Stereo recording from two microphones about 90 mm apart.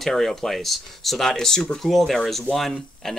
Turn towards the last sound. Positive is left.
turn(degrees=5)  # may be behind; listen again after turning